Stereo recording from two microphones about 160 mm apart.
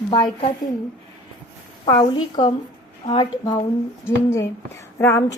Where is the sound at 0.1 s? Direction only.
35° left (ahead or behind).